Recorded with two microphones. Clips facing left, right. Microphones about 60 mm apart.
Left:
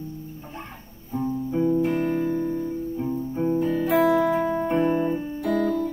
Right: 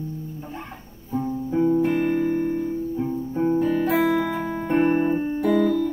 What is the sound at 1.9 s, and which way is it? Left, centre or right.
Music, right.